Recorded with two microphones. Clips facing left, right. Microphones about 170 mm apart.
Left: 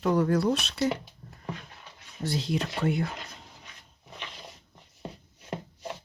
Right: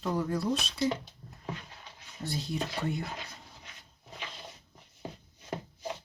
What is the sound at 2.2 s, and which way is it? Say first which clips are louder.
Speech: left 5 dB; 85° left.